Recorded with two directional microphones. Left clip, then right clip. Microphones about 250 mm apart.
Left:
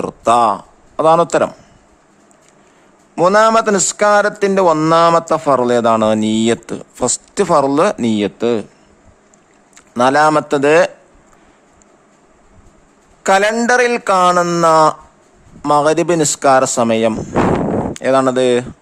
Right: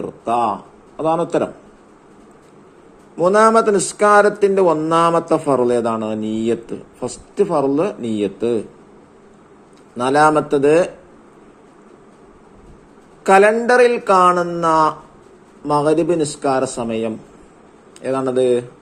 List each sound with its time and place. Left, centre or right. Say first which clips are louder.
0.0 s a sound: left 7 dB; left
3.2 s a man's voice: left 2 dB; left
3.5 s speech: left 1 dB; left
10.0 s speech: left 3 dB; left
13.2 s speech: right 1 dB; left
14.3 s a man's voice: left 6 dB; left
14.7 s a man's voice: left 2 dB; left